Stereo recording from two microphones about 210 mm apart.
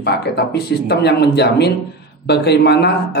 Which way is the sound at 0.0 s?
50° left (ahead or behind).